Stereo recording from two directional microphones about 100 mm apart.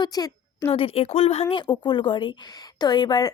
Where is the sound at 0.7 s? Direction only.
75° left (ahead or behind); by 1.4 s 90° left.